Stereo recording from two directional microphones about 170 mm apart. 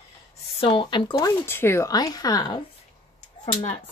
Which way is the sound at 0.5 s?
30° left (ahead or behind).